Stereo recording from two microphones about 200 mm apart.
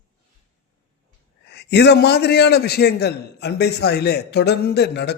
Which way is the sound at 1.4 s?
55° left (ahead or behind).